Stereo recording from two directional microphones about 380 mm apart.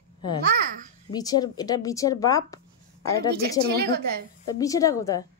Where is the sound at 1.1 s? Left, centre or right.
Centre.